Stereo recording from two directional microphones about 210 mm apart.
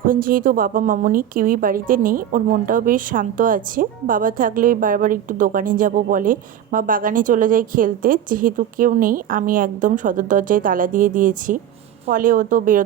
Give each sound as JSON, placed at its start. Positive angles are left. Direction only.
{"t": 0.0, "sound": "a woman's voice", "side_deg": -40}